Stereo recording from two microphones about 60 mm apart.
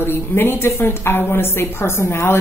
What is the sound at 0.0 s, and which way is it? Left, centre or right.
A woman's voice, left.